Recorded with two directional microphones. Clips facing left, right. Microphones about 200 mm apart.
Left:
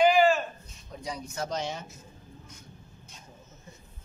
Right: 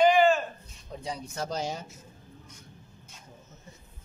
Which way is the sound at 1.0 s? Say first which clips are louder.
Even; 30° right (ahead or behind).